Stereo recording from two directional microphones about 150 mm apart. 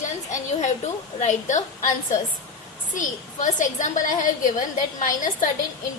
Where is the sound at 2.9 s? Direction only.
55° left (ahead or behind).